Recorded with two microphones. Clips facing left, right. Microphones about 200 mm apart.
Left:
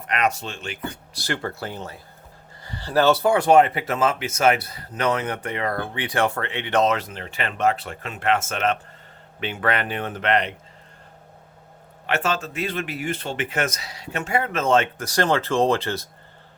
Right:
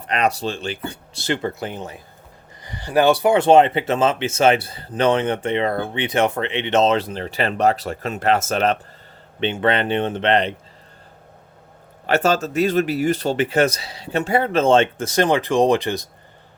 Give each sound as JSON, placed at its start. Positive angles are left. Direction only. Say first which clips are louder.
{"t": 0.0, "sound": "speech", "louder": "right 3 dB", "side_deg": -30}
{"t": 3.3, "sound": "speech", "louder": "right 3 dB", "side_deg": -25}
{"t": 12.0, "sound": "speech", "louder": "right 6 dB", "side_deg": -40}